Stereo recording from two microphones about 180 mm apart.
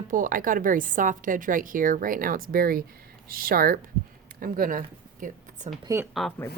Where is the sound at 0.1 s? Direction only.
50° right (ahead or behind).